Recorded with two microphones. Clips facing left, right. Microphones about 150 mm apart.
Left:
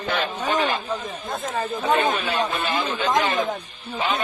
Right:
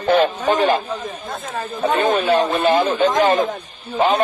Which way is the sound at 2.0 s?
45° right (ahead or behind).